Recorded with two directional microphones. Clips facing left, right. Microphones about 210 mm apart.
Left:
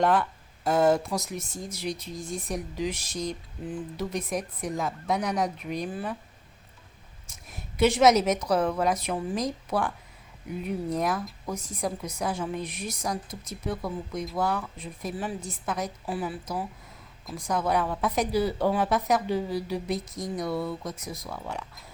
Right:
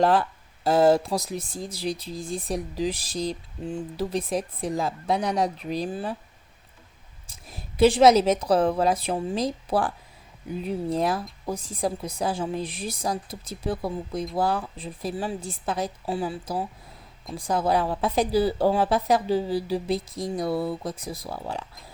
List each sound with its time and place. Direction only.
0.0 s speech: 30° right (ahead or behind)
7.3 s speech: 30° right (ahead or behind)